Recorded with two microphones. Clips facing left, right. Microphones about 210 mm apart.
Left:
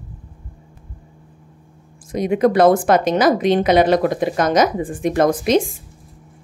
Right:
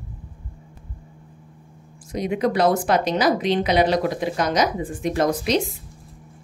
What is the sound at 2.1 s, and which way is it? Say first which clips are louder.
A woman's voice: left 6 dB; 50° left (ahead or behind).